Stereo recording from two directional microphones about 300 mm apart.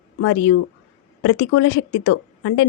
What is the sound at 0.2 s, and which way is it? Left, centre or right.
A woman's voice, left.